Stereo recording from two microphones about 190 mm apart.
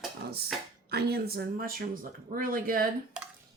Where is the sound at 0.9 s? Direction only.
55° right (ahead or behind).